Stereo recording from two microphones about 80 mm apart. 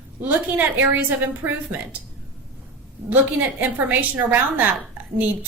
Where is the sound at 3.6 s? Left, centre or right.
Right.